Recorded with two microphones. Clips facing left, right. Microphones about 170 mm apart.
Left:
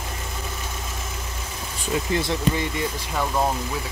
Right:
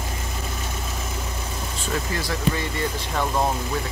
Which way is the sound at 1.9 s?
20° left (ahead or behind).